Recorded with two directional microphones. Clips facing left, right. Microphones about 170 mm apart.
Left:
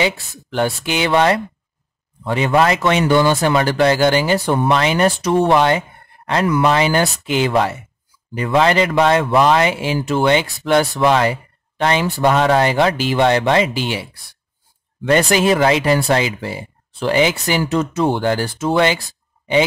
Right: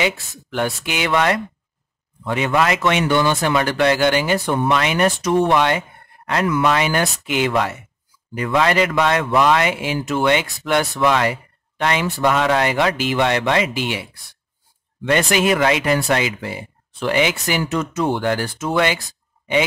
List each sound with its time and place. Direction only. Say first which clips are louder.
0.0 s speech: left 2 dB; 30° left (ahead or behind)